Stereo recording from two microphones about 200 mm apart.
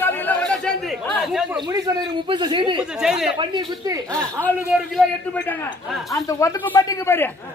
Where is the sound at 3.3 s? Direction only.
25° right (ahead or behind).